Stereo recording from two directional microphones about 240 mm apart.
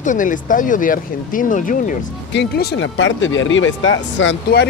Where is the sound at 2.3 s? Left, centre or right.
Left.